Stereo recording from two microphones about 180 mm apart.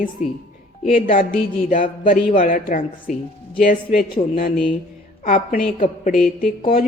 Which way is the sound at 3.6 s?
35° left (ahead or behind).